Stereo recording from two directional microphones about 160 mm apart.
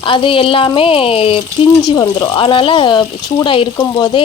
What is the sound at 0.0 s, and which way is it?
Speech, 35° left (ahead or behind).